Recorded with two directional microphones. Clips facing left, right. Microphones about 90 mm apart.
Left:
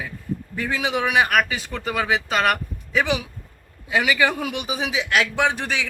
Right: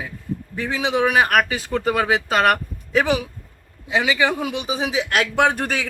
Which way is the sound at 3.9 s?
20° right (ahead or behind).